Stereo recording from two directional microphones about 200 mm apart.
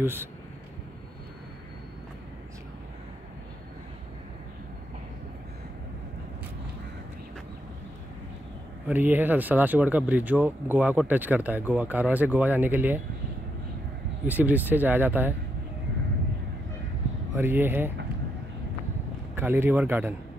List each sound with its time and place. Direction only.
0.0 s speech: 10° right (ahead or behind)
8.8 s speech: 10° right (ahead or behind)
14.2 s speech: 10° right (ahead or behind)
17.4 s speech: 10° right (ahead or behind)
19.3 s speech: 10° right (ahead or behind)